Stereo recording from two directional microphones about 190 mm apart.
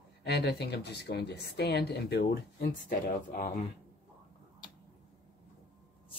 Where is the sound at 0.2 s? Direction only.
60° left (ahead or behind).